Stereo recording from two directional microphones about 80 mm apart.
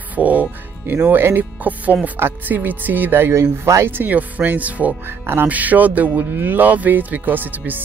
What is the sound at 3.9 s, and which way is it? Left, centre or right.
Speech, right.